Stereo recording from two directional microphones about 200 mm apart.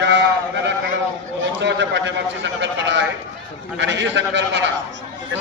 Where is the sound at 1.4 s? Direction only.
65° right (ahead or behind).